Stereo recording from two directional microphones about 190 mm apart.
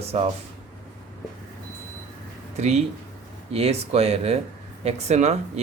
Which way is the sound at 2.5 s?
35° right (ahead or behind).